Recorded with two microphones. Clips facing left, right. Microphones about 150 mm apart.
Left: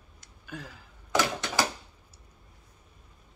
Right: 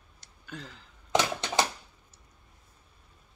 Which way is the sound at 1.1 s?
20° right (ahead or behind).